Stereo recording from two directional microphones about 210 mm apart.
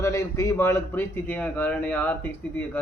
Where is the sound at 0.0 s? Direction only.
15° left (ahead or behind).